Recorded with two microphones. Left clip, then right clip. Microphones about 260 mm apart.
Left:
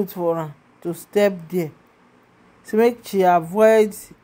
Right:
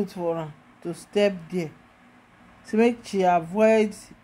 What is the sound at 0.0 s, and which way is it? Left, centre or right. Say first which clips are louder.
Speech: left 5 dB; centre.